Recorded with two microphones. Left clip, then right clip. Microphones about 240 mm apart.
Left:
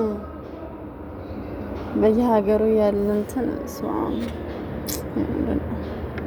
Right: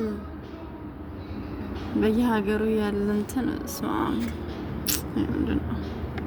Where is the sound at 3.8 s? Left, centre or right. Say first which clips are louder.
Left 2 dB; right.